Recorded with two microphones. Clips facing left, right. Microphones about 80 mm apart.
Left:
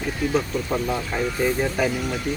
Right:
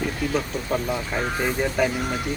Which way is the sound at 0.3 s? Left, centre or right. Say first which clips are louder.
Left 2 dB; centre.